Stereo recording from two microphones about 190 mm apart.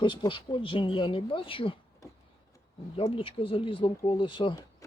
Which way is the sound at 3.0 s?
30° left (ahead or behind).